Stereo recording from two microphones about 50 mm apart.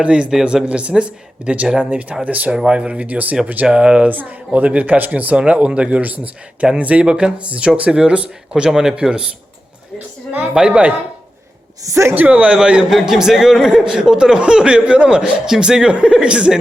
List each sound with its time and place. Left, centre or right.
0.0 s speech: right
2.5 s speech: centre
4.1 s a man's voice: right; by 9.2 s centre
10.5 s speech: centre
11.9 s speech: right
12.1 s speech: right
12.9 s a man's voice: centre